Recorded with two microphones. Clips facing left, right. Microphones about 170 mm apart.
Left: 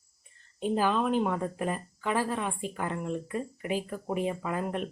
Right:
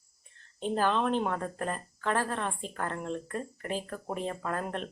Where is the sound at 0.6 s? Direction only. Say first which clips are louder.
Left 1 dB; 5° left (ahead or behind).